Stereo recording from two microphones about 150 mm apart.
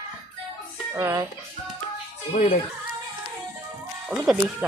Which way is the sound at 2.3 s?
65° left (ahead or behind).